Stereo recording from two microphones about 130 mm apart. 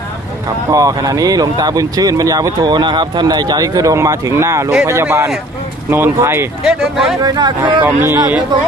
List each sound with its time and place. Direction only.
0.7 s speech: 25° right (ahead or behind)
6.7 s speech: 5° right (ahead or behind)
7.2 s speech: 30° right (ahead or behind)
7.9 s speech: 20° right (ahead or behind)
8.5 s speech: 35° right (ahead or behind)